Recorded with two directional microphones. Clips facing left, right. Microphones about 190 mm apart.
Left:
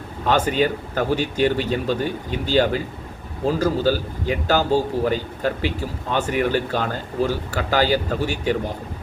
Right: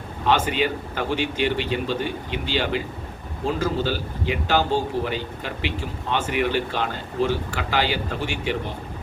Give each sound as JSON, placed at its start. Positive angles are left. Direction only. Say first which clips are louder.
{"t": 0.3, "sound": "a man's voice", "louder": "left 2 dB", "side_deg": 40}